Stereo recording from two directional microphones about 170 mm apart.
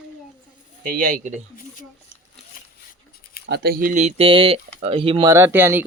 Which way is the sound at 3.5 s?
70° right (ahead or behind).